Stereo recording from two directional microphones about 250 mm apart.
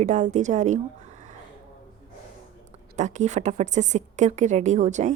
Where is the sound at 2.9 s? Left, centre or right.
Right.